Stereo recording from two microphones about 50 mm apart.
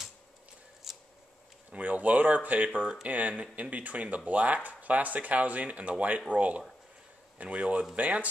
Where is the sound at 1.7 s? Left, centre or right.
Right.